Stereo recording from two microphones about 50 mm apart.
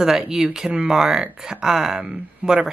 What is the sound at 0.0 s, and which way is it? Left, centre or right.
Speech, centre.